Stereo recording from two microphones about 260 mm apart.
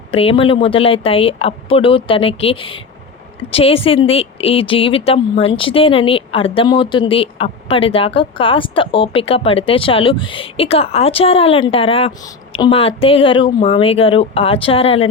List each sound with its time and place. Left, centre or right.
0.1 s speech: left